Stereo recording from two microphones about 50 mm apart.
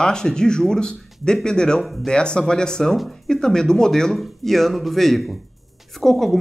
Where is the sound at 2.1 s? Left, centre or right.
Centre.